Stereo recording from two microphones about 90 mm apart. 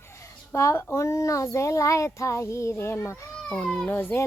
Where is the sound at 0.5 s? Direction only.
30° left (ahead or behind).